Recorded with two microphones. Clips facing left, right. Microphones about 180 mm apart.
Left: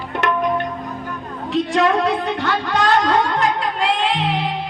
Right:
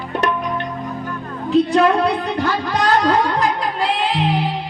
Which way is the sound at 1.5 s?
35° right (ahead or behind).